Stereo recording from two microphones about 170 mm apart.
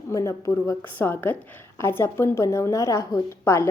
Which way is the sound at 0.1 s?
20° left (ahead or behind).